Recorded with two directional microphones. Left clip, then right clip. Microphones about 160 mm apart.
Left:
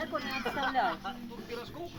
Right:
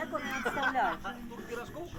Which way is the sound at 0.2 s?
15° left (ahead or behind).